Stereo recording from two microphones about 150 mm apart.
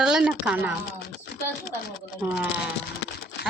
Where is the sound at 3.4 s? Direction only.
90° left.